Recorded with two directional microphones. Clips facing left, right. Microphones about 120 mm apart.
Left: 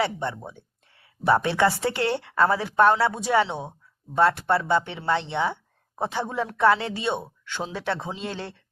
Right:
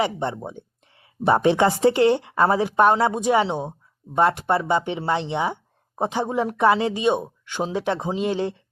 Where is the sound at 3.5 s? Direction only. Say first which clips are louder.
Right 6 dB; 30° right (ahead or behind).